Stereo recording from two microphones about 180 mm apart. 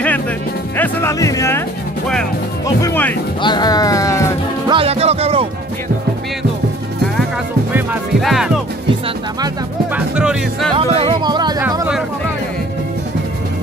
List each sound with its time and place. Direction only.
0.7 s speech: 10° left (ahead or behind)
2.6 s speech: 15° left (ahead or behind)
3.4 s music: 25° left (ahead or behind)
4.6 s music: 30° right (ahead or behind)
8.2 s music: centre (ahead or behind)
9.9 s music: 5° right (ahead or behind)
10.7 s music: 25° right (ahead or behind)